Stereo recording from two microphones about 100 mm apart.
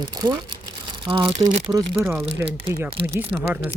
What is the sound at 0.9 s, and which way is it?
Speech, 60° right (ahead or behind).